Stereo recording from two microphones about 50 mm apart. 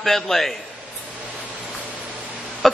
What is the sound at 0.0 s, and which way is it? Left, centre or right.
Speech, centre.